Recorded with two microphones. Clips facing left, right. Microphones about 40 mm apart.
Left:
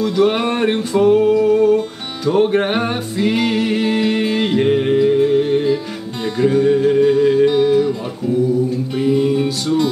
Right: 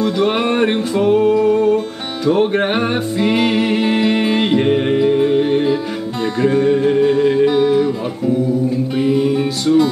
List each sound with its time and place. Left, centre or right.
0.0 s music: centre
8.9 s music: centre